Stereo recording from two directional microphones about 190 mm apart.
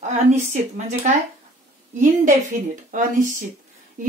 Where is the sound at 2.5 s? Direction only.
50° right (ahead or behind).